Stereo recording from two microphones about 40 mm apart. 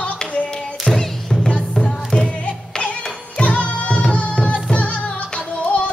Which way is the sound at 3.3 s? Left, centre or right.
Left.